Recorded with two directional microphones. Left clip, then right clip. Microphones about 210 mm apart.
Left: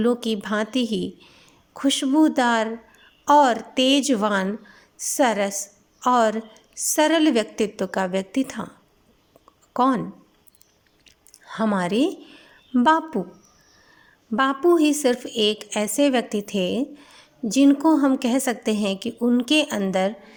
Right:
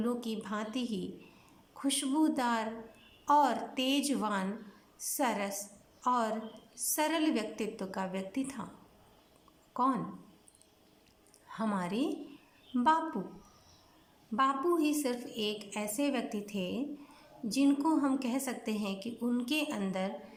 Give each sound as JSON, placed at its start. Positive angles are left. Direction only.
{"t": 0.0, "sound": "a woman's voice", "side_deg": 35}
{"t": 9.7, "sound": "a woman's voice", "side_deg": 35}
{"t": 11.4, "sound": "a woman's voice", "side_deg": 35}
{"t": 14.3, "sound": "a woman's voice", "side_deg": 35}